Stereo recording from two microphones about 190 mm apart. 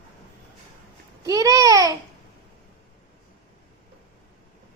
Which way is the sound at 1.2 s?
15° right (ahead or behind).